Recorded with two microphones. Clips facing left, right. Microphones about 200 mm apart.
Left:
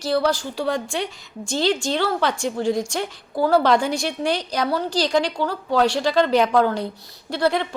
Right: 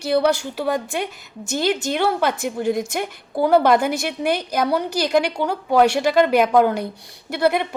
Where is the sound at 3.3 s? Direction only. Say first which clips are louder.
Right 2 dB; 15° right (ahead or behind).